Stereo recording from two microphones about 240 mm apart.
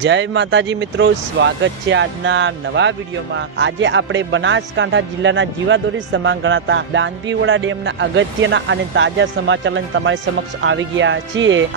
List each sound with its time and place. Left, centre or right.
0.0 s speech: right